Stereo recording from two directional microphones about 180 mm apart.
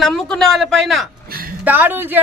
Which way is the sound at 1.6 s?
10° right (ahead or behind).